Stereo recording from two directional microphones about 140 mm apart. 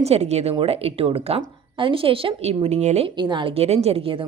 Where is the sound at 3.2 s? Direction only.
35° right (ahead or behind).